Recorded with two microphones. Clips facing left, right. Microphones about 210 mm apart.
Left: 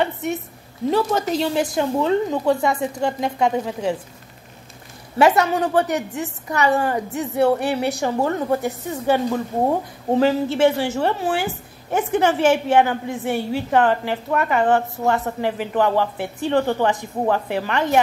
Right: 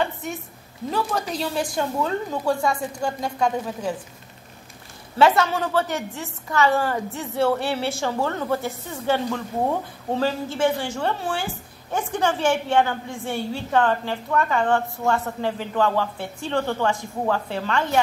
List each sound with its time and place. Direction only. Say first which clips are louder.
0.8 s a woman's voice: left 6 dB; 25° left (ahead or behind)
5.2 s a woman's voice: left 2 dB; 20° left (ahead or behind)